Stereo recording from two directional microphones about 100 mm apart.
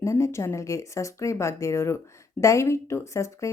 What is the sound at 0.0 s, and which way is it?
Speech, 30° left (ahead or behind).